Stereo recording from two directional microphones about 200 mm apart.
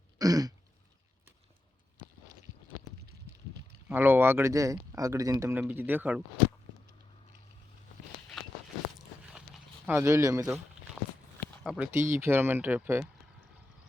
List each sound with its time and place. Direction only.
0.2 s throat clearing: 20° right (ahead or behind)
3.8 s speech: 10° right (ahead or behind)
9.8 s speech: 15° right (ahead or behind)
11.0 s walk: centre (ahead or behind)
11.6 s speech: 5° right (ahead or behind)